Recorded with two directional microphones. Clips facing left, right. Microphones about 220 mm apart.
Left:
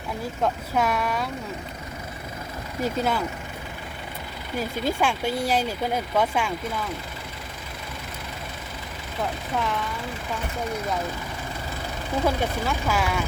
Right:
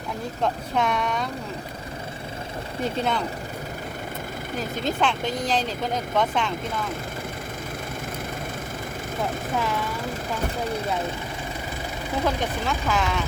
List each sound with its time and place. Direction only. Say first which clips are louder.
0.4 s speech: even; 5° left (ahead or behind)
2.8 s speech: left 1 dB; 5° left (ahead or behind)
4.9 s speech: even; 10° left (ahead or behind)
12.2 s speech: left 1 dB; 10° left (ahead or behind)